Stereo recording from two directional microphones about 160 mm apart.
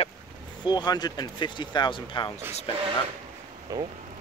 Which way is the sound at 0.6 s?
25° left (ahead or behind).